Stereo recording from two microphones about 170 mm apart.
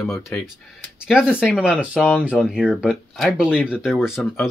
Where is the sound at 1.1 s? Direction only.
5° right (ahead or behind).